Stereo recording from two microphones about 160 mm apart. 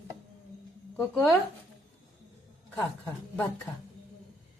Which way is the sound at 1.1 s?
10° left (ahead or behind).